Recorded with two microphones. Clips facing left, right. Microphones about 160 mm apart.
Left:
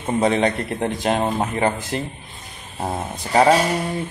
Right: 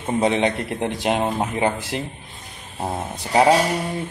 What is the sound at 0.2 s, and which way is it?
Speech, 15° right (ahead or behind).